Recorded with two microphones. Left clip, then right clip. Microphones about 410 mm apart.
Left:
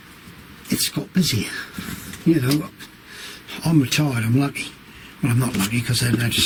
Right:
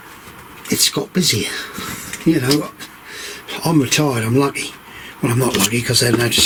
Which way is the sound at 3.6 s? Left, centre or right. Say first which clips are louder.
Right 5 dB; centre.